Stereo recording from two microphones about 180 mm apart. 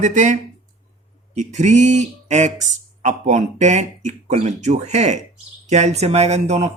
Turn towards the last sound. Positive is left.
turn(degrees=-40)  # may be behind; listen again after turning